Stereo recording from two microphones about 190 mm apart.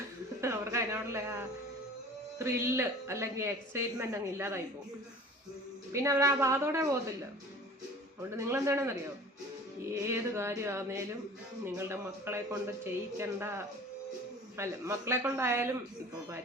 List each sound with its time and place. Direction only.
0.4 s a sound: 15° right (ahead or behind)
2.4 s a woman's voice: 15° right (ahead or behind)
5.9 s a woman's voice: 15° right (ahead or behind)
8.4 s a woman's voice: 15° right (ahead or behind)